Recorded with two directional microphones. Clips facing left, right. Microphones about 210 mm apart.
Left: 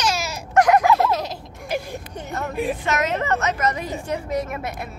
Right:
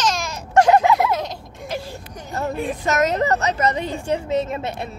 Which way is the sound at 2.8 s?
40° right (ahead or behind).